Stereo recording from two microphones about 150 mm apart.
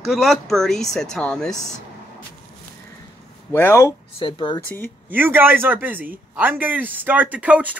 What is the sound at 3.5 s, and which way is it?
Speech, 15° left (ahead or behind).